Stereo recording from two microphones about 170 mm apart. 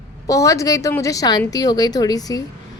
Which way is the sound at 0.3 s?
20° left (ahead or behind).